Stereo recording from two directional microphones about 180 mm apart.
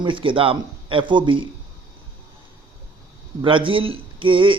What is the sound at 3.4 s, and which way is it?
A man's voice, 30° right (ahead or behind).